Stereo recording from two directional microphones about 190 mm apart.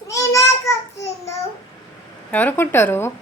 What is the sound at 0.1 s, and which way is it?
Child singing, 15° left (ahead or behind).